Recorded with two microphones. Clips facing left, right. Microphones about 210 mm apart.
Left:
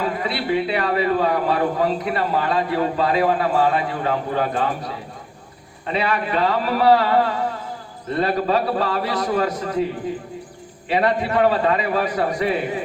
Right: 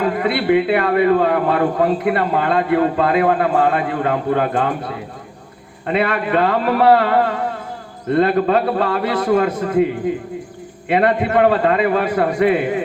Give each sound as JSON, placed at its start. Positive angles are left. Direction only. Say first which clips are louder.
{"t": 0.0, "sound": "a man's voice", "louder": "right 6 dB", "side_deg": -55}
{"t": 10.8, "sound": "a man's voice", "louder": "right 4 dB", "side_deg": -55}